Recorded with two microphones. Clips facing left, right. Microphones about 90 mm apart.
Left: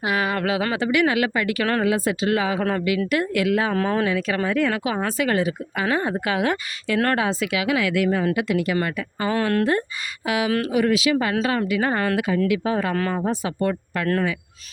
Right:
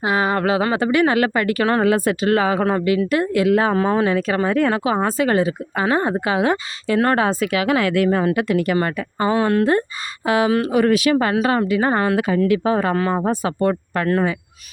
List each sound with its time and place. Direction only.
0.0 s speech: 30° right (ahead or behind)
3.1 s speech: 30° right (ahead or behind)
3.8 s speech: 20° right (ahead or behind)
4.0 s speech: 40° right (ahead or behind)
7.2 s speech: 45° right (ahead or behind)
9.3 s speech: 15° right (ahead or behind)
10.2 s speech: 35° right (ahead or behind)
11.4 s speech: 35° right (ahead or behind)
12.1 s speech: 45° right (ahead or behind)
12.5 s speech: 35° right (ahead or behind)
13.1 s speech: 45° right (ahead or behind)